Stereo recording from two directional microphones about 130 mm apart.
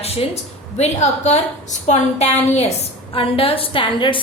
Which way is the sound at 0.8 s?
60° left (ahead or behind).